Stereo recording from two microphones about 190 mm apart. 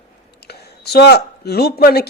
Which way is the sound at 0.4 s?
60° left (ahead or behind).